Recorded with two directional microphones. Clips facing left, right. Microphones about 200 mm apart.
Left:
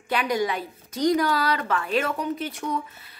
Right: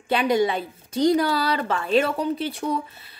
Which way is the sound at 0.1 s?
25° right (ahead or behind).